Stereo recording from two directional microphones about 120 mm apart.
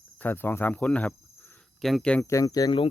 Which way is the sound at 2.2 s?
25° left (ahead or behind).